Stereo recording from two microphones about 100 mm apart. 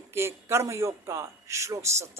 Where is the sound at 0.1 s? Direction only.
25° right (ahead or behind).